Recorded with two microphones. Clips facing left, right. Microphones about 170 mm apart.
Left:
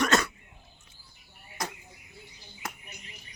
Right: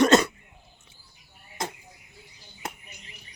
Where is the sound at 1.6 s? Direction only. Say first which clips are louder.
Right 3 dB; 25° right (ahead or behind).